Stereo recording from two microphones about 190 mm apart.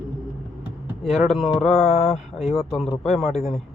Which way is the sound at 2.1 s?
35° left (ahead or behind).